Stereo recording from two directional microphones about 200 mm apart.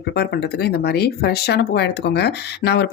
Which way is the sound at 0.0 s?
55° left (ahead or behind).